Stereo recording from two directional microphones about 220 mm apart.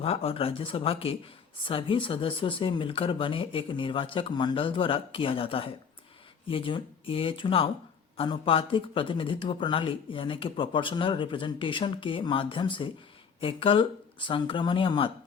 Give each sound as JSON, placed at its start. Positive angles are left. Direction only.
{"t": 0.0, "sound": "speech", "side_deg": 25}